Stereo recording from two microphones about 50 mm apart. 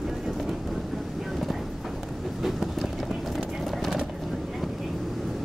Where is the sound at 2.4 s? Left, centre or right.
Centre.